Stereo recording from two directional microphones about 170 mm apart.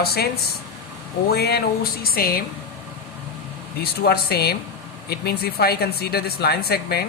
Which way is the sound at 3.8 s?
65° left (ahead or behind).